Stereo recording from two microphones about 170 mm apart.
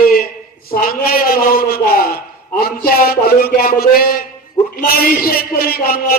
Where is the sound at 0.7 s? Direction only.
60° left (ahead or behind).